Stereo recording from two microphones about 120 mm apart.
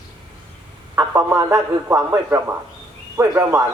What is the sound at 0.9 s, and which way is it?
Speech, 25° right (ahead or behind).